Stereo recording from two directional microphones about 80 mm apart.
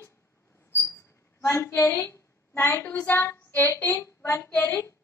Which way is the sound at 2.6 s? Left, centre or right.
Left.